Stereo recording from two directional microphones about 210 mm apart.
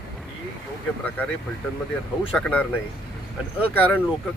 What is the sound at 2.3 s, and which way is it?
Speech, 5° left (ahead or behind).